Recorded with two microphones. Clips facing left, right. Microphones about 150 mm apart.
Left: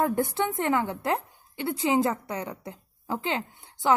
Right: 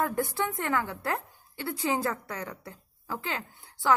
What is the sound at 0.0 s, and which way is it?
A woman's voice, 25° left (ahead or behind).